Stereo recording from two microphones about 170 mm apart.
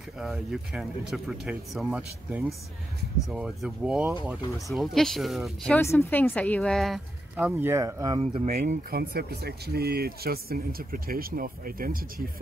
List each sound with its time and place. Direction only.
0.2 s speech: centre (ahead or behind)
5.8 s speech: 15° left (ahead or behind); by 8.2 s 20° right (ahead or behind)
8.2 s speech: 35° right (ahead or behind)
8.5 s speech: 60° right (ahead or behind)